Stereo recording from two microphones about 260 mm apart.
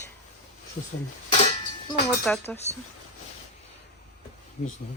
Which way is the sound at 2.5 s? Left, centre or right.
Left.